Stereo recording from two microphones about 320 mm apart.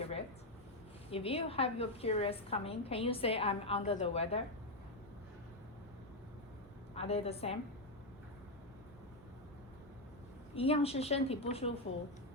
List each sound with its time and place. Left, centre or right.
1.1 s a woman's voice: centre
6.9 s a woman's voice: centre
10.5 s a woman's voice: centre